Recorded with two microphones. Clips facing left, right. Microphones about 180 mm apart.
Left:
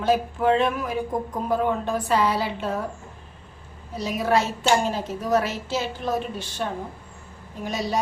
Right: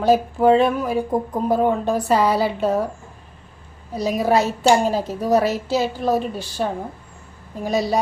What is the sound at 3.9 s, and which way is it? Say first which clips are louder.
A woman's voice: right 4 dB; 40° right (ahead or behind).